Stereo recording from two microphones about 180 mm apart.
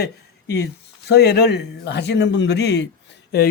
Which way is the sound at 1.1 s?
65° left (ahead or behind).